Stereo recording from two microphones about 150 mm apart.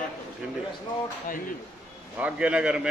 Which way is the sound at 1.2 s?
65° left (ahead or behind).